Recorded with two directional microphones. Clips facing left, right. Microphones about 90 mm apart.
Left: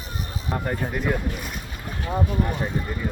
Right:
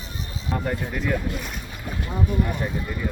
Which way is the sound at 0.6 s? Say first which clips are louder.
Left 2 dB; 15° left (ahead or behind).